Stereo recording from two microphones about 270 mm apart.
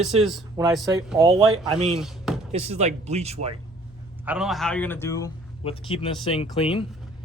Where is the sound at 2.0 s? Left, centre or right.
Centre.